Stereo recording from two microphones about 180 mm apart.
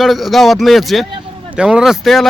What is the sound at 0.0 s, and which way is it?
Speech, centre (ahead or behind).